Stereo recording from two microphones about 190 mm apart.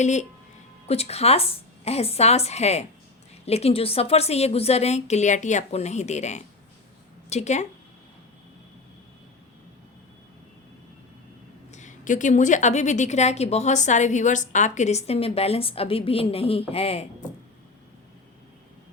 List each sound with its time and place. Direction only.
0.0 s a woman's voice: 35° left (ahead or behind)
11.7 s a woman's voice: 40° left (ahead or behind)